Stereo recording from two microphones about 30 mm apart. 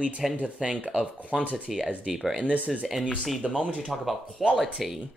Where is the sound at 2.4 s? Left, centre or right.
Right.